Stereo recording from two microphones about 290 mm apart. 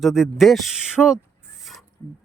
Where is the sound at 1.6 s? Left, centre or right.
Centre.